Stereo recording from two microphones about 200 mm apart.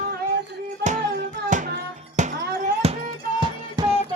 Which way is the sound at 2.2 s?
35° right (ahead or behind).